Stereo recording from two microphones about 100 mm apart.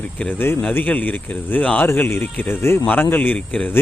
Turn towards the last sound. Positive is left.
turn(degrees=15)  # may be behind; listen again after turning